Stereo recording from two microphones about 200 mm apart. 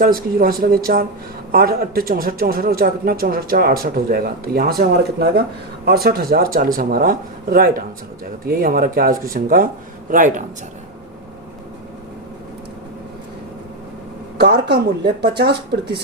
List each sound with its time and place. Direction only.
0.0 s speech: 45° right (ahead or behind)
5.8 s a man's voice: 50° right (ahead or behind)
14.3 s speech: 50° right (ahead or behind)